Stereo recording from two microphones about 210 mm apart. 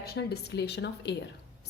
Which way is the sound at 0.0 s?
50° left (ahead or behind).